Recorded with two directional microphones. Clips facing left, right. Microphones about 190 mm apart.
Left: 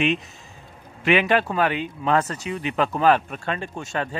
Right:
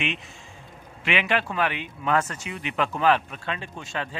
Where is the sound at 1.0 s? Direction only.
40° left (ahead or behind).